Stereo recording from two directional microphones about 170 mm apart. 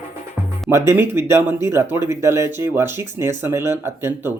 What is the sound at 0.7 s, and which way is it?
Speech, 15° right (ahead or behind).